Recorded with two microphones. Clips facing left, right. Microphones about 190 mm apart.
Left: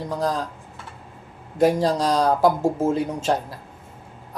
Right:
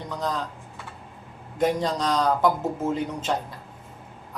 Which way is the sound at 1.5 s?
30° left (ahead or behind).